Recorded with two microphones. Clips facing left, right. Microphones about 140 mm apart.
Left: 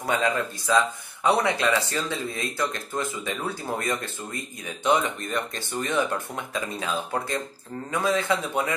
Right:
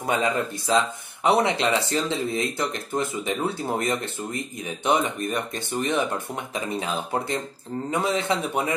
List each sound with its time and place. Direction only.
0.0 s speech: 20° right (ahead or behind)